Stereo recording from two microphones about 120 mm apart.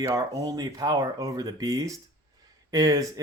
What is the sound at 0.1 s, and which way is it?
Speech, 30° right (ahead or behind).